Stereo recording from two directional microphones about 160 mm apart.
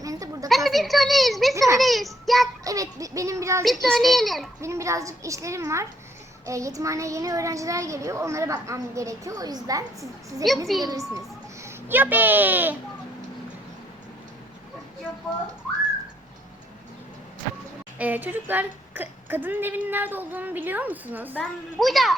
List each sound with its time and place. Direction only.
0.0 s a sound: 20° right (ahead or behind)
0.4 s a woman's voice: centre (ahead or behind)
1.5 s a child's voice: 20° right (ahead or behind)
1.8 s a child's voice: centre (ahead or behind)
2.6 s a child's voice: 20° right (ahead or behind)
3.6 s a child's voice: centre (ahead or behind)
4.6 s a child's voice: 20° right (ahead or behind)
10.7 s a child's voice: centre (ahead or behind)
11.6 s a child's voice: 10° right (ahead or behind)
17.9 s speech: 10° right (ahead or behind)
21.3 s a child's voice: centre (ahead or behind)